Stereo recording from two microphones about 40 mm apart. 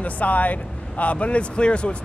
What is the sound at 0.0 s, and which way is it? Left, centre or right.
Speech, left.